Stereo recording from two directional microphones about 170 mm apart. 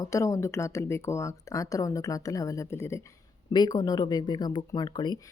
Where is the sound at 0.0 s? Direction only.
20° left (ahead or behind).